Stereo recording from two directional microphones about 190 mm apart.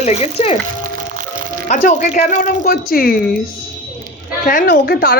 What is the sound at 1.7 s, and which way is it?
Speech, 40° left (ahead or behind).